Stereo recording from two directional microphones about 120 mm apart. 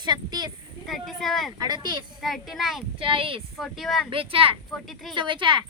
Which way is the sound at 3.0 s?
45° right (ahead or behind).